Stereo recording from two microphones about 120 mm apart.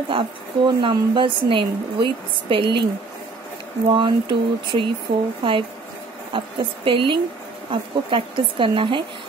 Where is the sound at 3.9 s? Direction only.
40° right (ahead or behind).